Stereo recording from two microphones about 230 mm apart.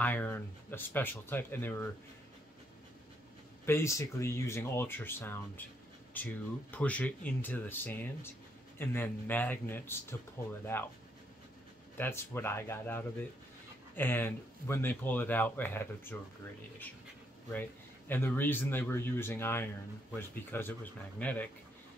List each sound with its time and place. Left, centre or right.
0.0 s speech: centre
3.6 s speech: centre
12.0 s speech: centre
17.5 s speech: centre